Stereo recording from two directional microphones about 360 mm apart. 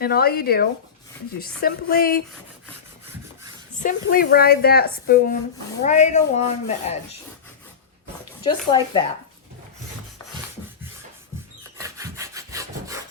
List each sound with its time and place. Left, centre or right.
0.0 s a woman's voice: left
3.8 s a woman's voice: left
8.4 s speech: centre
11.6 s wood: centre